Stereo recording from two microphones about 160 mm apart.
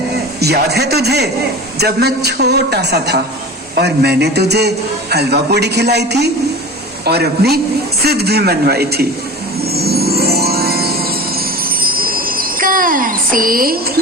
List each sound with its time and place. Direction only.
0.3 s a man's voice: 90° right
9.7 s chime: 80° right
11.8 s wind chime: 65° right (ahead or behind)